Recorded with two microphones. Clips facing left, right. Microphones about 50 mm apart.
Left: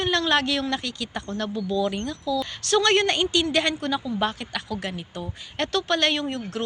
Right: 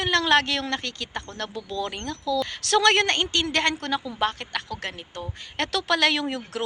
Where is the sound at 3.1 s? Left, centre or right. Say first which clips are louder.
Left 2 dB; right.